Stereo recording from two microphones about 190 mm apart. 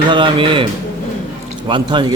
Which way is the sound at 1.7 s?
25° right (ahead or behind).